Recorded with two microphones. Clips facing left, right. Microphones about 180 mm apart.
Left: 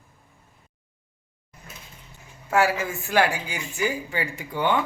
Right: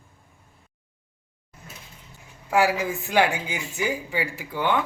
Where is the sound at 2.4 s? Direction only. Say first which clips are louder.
Right 1 dB; 15° right (ahead or behind).